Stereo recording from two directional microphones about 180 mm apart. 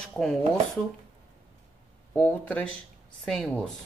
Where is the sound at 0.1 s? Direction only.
5° left (ahead or behind).